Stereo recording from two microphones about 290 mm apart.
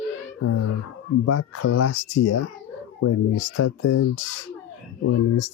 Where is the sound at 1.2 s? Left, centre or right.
Left.